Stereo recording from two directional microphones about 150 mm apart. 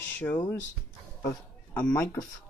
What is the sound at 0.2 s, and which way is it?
A man's voice, 10° left (ahead or behind).